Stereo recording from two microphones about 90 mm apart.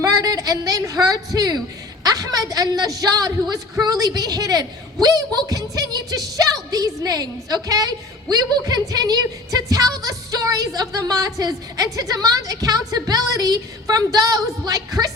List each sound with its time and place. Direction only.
0.0 s a woman's voice: 45° right (ahead or behind)